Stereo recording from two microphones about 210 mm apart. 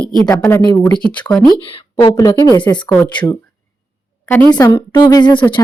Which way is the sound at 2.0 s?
15° left (ahead or behind).